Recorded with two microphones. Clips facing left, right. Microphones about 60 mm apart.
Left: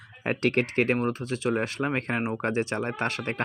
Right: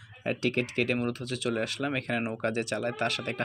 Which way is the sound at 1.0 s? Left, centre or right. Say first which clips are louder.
Left 3 dB; left.